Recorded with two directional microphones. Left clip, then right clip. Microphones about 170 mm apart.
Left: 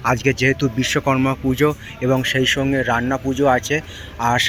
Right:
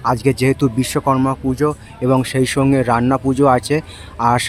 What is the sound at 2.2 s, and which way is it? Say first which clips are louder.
Speech: right 1 dB; 25° right (ahead or behind).